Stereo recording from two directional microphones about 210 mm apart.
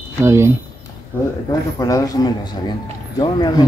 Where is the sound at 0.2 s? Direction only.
15° right (ahead or behind).